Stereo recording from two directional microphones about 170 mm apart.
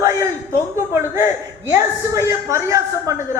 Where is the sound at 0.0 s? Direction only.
15° right (ahead or behind).